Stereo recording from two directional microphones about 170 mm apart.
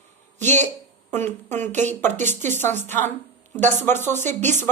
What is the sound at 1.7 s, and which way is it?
Speech, 45° right (ahead or behind).